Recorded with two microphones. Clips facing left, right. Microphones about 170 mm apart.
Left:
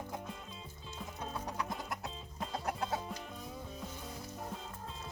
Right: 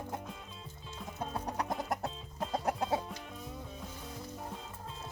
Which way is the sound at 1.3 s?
40° right (ahead or behind).